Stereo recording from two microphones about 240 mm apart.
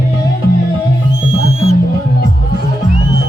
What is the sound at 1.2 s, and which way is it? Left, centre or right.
Music, right.